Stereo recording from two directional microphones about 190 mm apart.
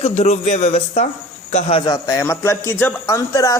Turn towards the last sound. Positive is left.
turn(degrees=15)  # may be behind; listen again after turning